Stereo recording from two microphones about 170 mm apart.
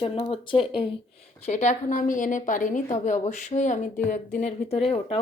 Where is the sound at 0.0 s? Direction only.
30° left (ahead or behind).